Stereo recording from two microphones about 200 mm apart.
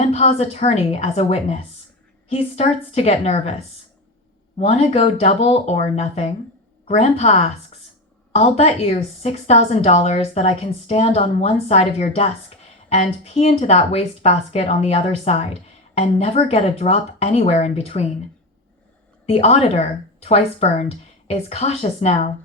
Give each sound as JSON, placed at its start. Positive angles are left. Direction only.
{"t": 0.1, "sound": "a woman's voice", "side_deg": 30}
{"t": 4.5, "sound": "a woman's voice", "side_deg": 30}
{"t": 19.2, "sound": "a woman's voice", "side_deg": 30}